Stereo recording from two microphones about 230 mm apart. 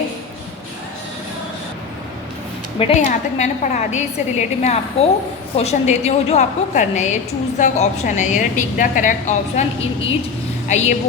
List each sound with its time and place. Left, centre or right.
2.7 s a woman's voice: left